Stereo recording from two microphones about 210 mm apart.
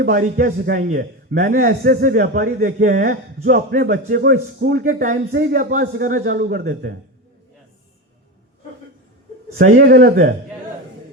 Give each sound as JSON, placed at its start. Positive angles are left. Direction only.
{"t": 0.0, "sound": "a man's voice", "side_deg": -45}
{"t": 9.6, "sound": "a man's voice", "side_deg": -45}